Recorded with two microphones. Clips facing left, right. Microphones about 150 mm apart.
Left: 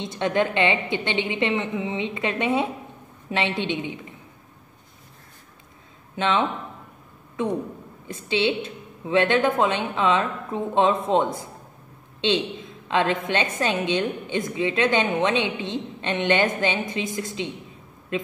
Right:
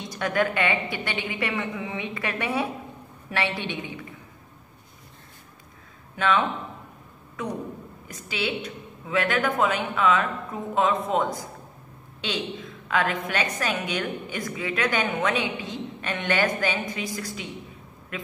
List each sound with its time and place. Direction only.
0.0 s a woman's voice: 25° left (ahead or behind)
6.1 s a woman's voice: 25° left (ahead or behind)